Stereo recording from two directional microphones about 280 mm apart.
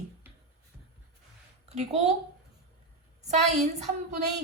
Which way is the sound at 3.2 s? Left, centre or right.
Right.